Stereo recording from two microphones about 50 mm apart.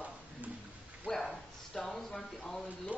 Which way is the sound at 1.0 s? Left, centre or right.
Centre.